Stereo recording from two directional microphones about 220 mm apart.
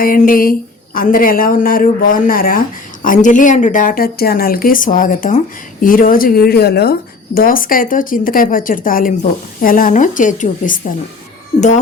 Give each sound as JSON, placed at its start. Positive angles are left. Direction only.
{"t": 0.0, "sound": "speech", "side_deg": 40}